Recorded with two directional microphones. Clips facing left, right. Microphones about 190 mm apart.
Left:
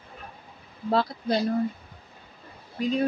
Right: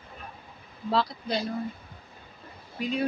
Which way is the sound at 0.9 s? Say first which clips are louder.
Left 3 dB; 50° left (ahead or behind).